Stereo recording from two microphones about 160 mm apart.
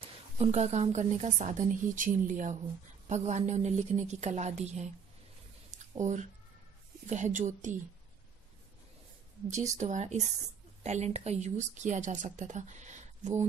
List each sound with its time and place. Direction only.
0.4 s speech: 45° right (ahead or behind)
5.9 s speech: 50° right (ahead or behind)
9.8 s speech: 50° right (ahead or behind)